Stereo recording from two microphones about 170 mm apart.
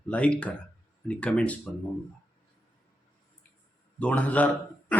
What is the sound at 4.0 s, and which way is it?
Speech, 10° left (ahead or behind).